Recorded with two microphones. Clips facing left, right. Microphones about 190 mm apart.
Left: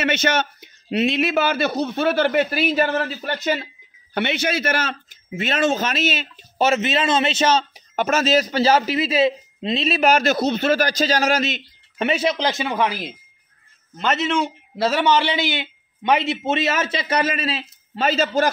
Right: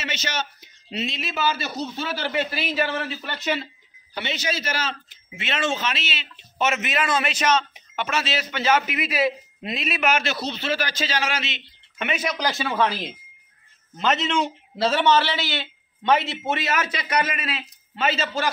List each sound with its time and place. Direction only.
0.0 s a man's voice: 55° left (ahead or behind)
4.1 s a man's voice: 55° left (ahead or behind)
5.4 s speech: 40° left (ahead or behind)
6.7 s a man's voice: 30° left (ahead or behind)